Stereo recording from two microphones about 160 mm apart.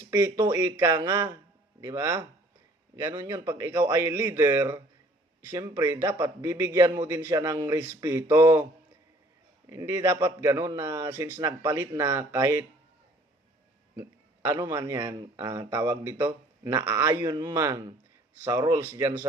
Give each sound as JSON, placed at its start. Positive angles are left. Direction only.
{"t": 0.1, "sound": "a man's voice", "side_deg": -20}
{"t": 9.6, "sound": "a man's voice", "side_deg": -15}
{"t": 13.9, "sound": "a man's voice", "side_deg": -15}